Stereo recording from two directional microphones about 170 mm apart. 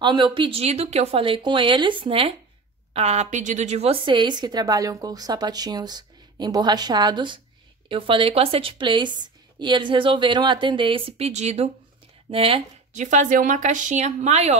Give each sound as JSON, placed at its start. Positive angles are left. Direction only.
{"t": 0.0, "sound": "a woman's voice", "side_deg": -30}